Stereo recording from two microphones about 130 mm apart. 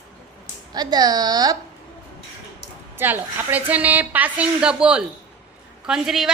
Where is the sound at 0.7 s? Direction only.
30° right (ahead or behind).